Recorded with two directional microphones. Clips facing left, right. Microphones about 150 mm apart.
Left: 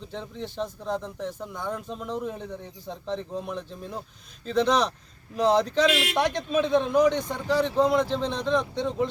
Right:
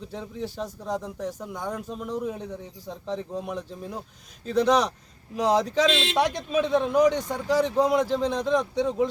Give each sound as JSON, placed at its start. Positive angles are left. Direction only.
{"t": 0.1, "sound": "speech", "side_deg": -10}
{"t": 5.9, "sound": "a man's voice", "side_deg": -25}
{"t": 6.1, "sound": "speech", "side_deg": -10}